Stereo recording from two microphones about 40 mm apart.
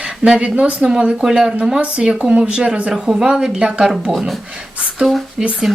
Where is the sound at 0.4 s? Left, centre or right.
Right.